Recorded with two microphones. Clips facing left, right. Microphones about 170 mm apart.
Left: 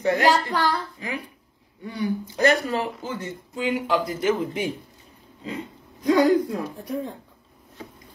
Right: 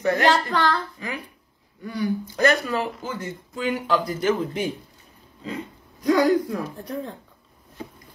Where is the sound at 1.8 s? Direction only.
20° left (ahead or behind).